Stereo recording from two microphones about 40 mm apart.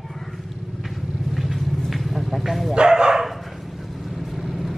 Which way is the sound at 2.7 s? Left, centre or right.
Right.